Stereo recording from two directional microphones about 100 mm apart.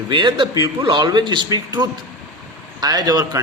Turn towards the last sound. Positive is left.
turn(degrees=-40)  # may be behind; listen again after turning